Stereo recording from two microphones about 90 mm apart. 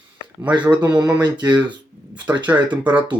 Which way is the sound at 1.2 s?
55° right (ahead or behind).